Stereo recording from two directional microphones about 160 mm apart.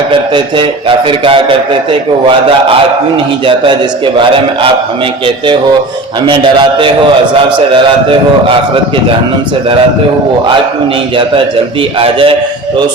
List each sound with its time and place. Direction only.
0.1 s a man's voice: 30° right (ahead or behind)
3.4 s a man's voice: 30° right (ahead or behind)
6.2 s a man's voice: 30° right (ahead or behind)
11.9 s a man's voice: 35° right (ahead or behind)